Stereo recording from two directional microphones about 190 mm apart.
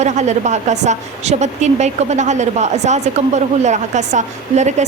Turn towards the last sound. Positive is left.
turn(degrees=-40)  # may be behind; listen again after turning